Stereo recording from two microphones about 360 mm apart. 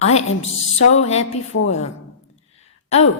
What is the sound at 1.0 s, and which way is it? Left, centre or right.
Speech, centre.